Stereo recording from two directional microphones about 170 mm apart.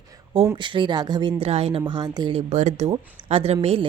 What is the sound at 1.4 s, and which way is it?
A woman's voice, 35° right (ahead or behind).